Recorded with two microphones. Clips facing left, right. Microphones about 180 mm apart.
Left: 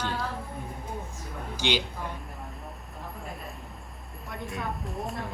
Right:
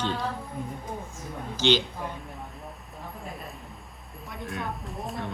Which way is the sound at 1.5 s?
10° left (ahead or behind).